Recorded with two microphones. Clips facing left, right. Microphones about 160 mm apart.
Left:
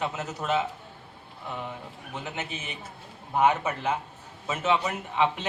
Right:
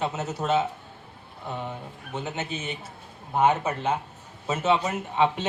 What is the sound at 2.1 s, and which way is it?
Speech, 25° right (ahead or behind).